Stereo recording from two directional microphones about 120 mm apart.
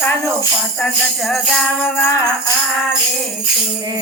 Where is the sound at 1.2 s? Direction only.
Centre (ahead or behind).